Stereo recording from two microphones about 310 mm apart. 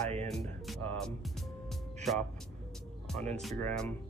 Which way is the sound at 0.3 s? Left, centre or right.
Centre.